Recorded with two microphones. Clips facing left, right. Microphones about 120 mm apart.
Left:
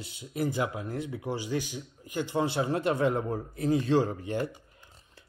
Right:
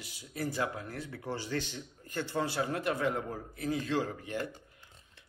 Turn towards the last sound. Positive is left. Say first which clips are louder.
# left 6 dB
turn(degrees=30)  # may be behind; listen again after turning